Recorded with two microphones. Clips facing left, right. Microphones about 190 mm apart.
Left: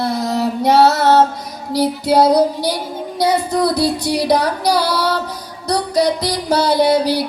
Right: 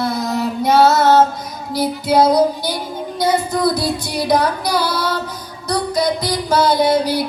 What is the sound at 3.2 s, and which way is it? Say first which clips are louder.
Female singing: left 1 dB; 35° left (ahead or behind).